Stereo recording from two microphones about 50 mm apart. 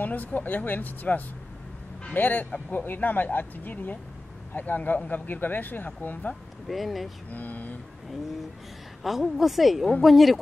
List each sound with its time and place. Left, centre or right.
0.0 s speech: left
6.7 s a woman's voice: centre
7.3 s speech: left
9.0 s a woman's voice: centre